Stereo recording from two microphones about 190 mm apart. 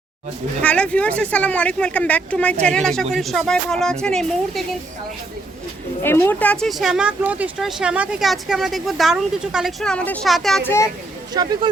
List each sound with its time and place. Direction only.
0.6 s speech: 5° left (ahead or behind)
6.0 s speech: 10° left (ahead or behind)
11.3 s speech: 20° right (ahead or behind)